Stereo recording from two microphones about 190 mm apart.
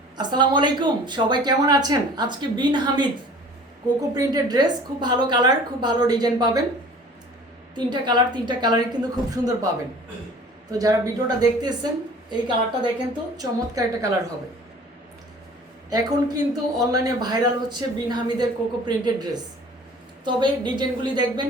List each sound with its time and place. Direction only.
0.2 s speech: 25° right (ahead or behind)
4.1 s speech: 20° right (ahead or behind)
7.9 s speech: 25° right (ahead or behind)
10.7 s speech: 20° right (ahead or behind)
15.9 s speech: 20° right (ahead or behind)